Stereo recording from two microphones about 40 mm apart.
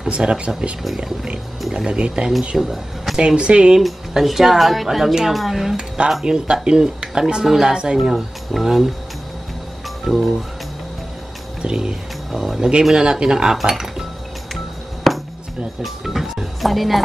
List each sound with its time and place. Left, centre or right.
0.1 s speech: right
0.8 s speech: centre
1.9 s speech: right
2.5 s speech: centre
3.2 s speech: right
4.1 s speech: centre
6.2 s speech: right
10.0 s speech: centre
11.6 s speech: centre
15.1 s music: centre
15.8 s speech: centre